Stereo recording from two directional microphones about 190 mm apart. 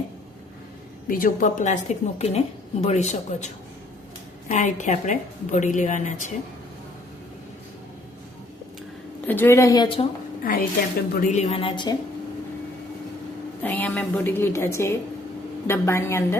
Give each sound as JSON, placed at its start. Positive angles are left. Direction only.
{"t": 1.0, "sound": "a woman's voice", "side_deg": 45}
{"t": 9.2, "sound": "a woman's voice", "side_deg": 10}
{"t": 10.4, "sound": "a woman's voice", "side_deg": 50}
{"t": 13.6, "sound": "a woman's voice", "side_deg": 5}